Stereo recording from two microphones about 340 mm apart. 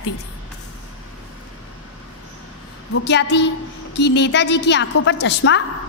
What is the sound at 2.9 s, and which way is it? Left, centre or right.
A woman's voice, left.